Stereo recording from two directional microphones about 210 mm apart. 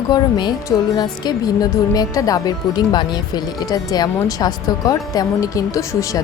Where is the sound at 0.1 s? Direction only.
20° left (ahead or behind).